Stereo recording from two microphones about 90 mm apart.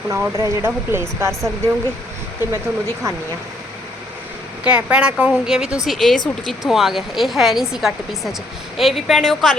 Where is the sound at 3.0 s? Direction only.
35° right (ahead or behind).